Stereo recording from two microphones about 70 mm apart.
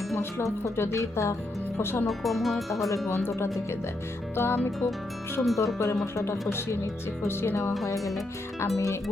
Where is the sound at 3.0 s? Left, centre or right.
Left.